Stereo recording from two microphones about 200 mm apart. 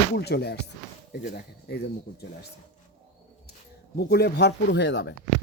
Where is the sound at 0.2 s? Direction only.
55° left (ahead or behind).